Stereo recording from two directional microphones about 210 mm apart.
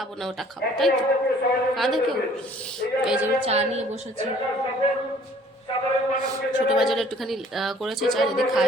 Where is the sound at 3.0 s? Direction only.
5° right (ahead or behind).